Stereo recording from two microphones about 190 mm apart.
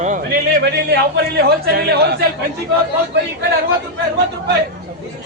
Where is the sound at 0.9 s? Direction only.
55° right (ahead or behind).